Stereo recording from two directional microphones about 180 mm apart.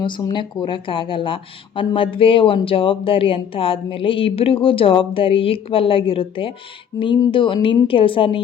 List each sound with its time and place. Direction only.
0.0 s speech: 25° left (ahead or behind)